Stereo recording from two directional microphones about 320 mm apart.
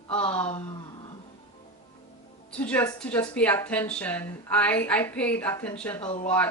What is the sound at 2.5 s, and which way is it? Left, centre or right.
A woman's voice, centre.